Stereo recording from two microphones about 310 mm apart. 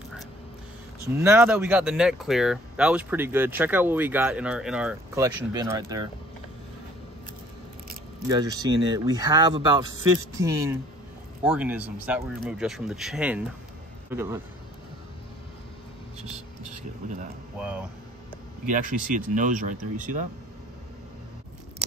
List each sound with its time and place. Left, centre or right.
1.0 s speech: centre
8.3 s speech: centre
17.6 s speech: centre
18.7 s speech: right